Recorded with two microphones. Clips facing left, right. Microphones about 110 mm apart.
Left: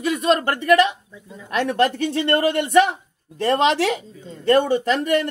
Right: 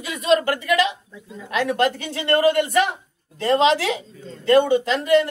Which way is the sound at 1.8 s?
45° left (ahead or behind).